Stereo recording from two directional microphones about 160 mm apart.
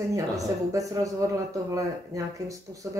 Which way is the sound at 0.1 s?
20° right (ahead or behind).